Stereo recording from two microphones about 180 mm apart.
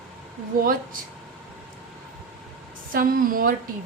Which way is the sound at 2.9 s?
50° right (ahead or behind).